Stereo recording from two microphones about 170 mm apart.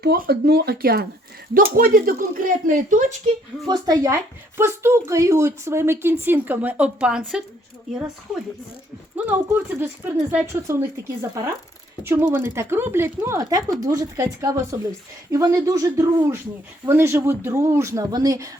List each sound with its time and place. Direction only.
0.0 s speech: 70° right (ahead or behind); by 3.3 s 50° right (ahead or behind)
3.7 s speech: 25° right (ahead or behind); by 7.4 s 5° right (ahead or behind)
9.1 s speech: 10° right (ahead or behind)